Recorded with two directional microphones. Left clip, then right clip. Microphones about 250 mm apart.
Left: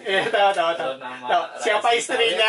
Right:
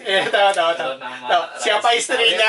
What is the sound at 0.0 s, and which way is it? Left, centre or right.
A man's voice, centre.